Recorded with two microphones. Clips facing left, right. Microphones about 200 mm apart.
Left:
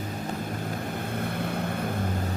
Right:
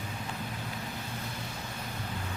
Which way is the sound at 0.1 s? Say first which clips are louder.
Left 7 dB; 45° left (ahead or behind).